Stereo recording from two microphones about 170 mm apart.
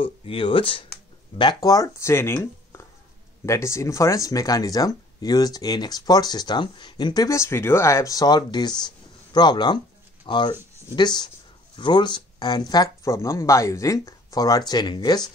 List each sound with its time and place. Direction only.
0.0 s speech: 30° left (ahead or behind)